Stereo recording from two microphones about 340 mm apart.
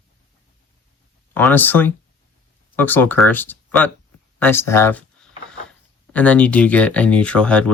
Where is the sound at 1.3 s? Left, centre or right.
Centre.